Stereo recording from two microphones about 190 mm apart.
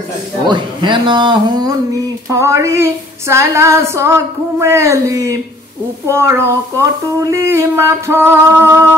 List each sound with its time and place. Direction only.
0.5 s speech: 25° right (ahead or behind)
2.2 s female singing: 15° right (ahead or behind)